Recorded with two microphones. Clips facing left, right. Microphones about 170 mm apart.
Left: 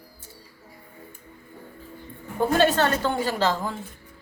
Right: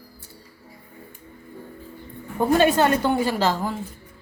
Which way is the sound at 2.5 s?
15° right (ahead or behind).